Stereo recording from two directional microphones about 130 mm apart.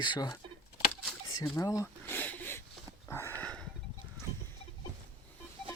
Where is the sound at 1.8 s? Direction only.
15° left (ahead or behind).